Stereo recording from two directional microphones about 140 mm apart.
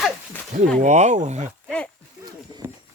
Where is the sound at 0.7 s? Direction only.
60° right (ahead or behind).